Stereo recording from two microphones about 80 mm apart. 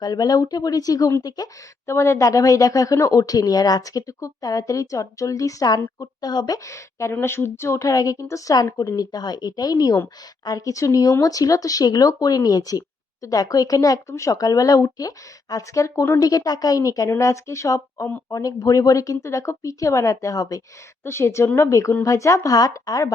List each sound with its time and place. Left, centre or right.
0.0 s speech: left
1.9 s speech: left
6.7 s a woman's voice: left
9.1 s speech: left
21.0 s a woman's voice: left